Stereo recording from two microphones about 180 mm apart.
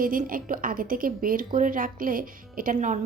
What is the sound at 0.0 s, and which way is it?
Speech, 50° right (ahead or behind).